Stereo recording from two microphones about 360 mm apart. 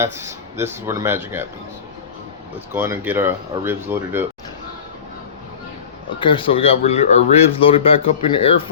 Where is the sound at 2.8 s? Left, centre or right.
Centre.